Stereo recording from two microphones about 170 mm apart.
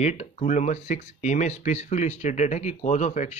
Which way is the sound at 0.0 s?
40° left (ahead or behind).